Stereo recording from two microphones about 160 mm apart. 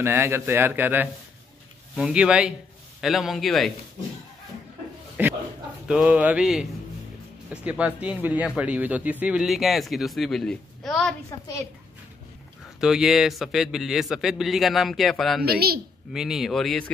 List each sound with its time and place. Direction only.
0.0 s a man's voice: 15° right (ahead or behind); by 3.7 s centre (ahead or behind)
5.2 s a sound: 10° right (ahead or behind)
5.9 s a man's voice: 5° right (ahead or behind)
12.8 s a man's voice: 5° right (ahead or behind)
15.4 s speech: 75° right (ahead or behind)
16.1 s a man's voice: centre (ahead or behind)